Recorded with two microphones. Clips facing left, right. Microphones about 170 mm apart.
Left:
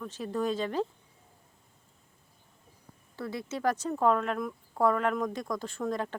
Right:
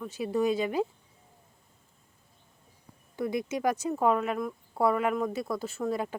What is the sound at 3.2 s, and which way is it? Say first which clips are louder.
Speech: right 5 dB; 15° right (ahead or behind).